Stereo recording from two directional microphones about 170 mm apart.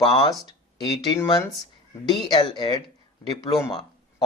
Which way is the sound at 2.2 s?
25° left (ahead or behind).